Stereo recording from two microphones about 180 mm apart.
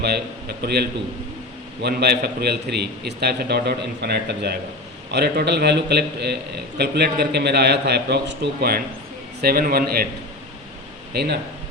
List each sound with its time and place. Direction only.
0.0 s a man's voice: 65° right (ahead or behind)
11.1 s speech: 65° right (ahead or behind)